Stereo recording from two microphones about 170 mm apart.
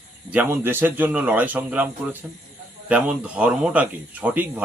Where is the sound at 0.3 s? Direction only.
10° right (ahead or behind).